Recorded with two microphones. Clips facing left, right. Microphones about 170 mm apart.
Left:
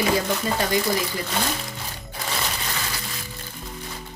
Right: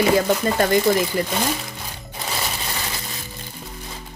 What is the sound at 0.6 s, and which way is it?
Speech, 50° right (ahead or behind).